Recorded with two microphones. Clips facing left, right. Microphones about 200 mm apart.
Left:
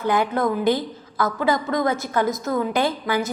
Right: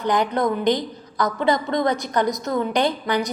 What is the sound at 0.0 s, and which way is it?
A woman's voice, 5° left (ahead or behind).